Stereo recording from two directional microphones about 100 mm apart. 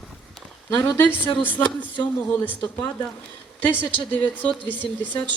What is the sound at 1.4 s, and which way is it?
Speech, 15° left (ahead or behind).